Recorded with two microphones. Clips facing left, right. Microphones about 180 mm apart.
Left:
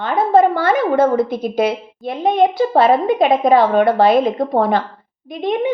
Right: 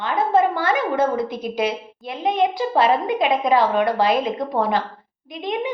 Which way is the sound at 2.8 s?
45° left (ahead or behind).